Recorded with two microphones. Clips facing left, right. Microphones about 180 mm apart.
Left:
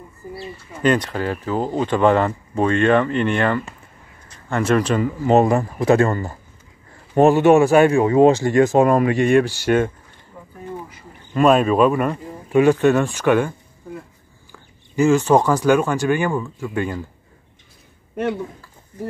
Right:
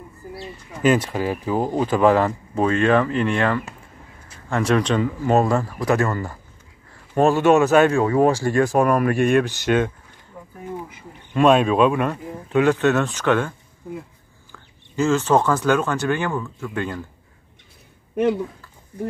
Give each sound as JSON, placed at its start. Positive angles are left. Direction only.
{"t": 0.3, "sound": "speech", "side_deg": -5}
{"t": 5.3, "sound": "speech", "side_deg": 20}
{"t": 10.4, "sound": "a sound", "side_deg": -10}
{"t": 11.3, "sound": "speech", "side_deg": 0}